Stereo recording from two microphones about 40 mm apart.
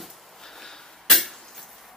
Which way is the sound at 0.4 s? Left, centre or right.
Centre.